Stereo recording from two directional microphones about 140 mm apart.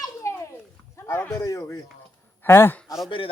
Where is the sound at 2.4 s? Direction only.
15° left (ahead or behind).